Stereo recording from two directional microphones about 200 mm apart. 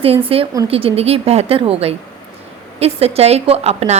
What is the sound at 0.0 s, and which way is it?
A woman's voice, 30° right (ahead or behind).